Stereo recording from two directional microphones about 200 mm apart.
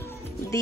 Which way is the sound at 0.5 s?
15° left (ahead or behind).